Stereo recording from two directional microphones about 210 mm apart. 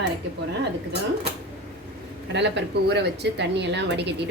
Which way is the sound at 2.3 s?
55° right (ahead or behind).